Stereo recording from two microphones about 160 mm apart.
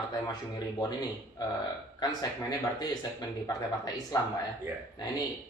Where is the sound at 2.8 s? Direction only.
25° left (ahead or behind).